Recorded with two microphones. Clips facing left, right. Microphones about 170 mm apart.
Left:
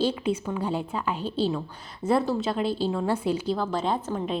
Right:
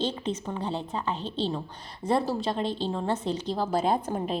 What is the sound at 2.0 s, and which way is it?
Speech, 25° left (ahead or behind).